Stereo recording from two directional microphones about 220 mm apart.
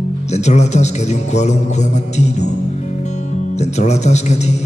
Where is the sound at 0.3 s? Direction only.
30° left (ahead or behind).